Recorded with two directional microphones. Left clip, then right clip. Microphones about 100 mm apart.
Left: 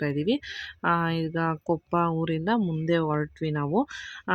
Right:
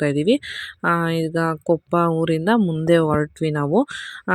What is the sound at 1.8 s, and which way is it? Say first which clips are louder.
Speech: right 5 dB; 40° right (ahead or behind).